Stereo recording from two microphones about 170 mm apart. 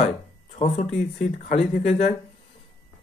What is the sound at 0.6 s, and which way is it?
Speech, 40° left (ahead or behind).